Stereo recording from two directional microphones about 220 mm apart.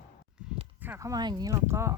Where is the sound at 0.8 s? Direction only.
10° right (ahead or behind).